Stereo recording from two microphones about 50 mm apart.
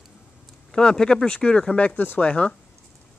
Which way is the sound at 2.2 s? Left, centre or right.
Left.